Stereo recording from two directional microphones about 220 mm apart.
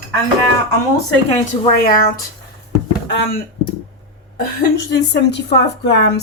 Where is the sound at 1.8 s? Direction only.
40° left (ahead or behind).